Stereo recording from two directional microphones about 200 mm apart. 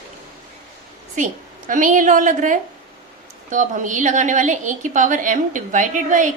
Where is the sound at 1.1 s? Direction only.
40° right (ahead or behind).